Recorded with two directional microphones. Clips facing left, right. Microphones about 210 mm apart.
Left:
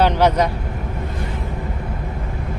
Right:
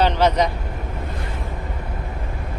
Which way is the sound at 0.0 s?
10° left (ahead or behind).